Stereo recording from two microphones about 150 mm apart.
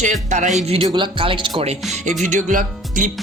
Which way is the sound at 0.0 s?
55° right (ahead or behind).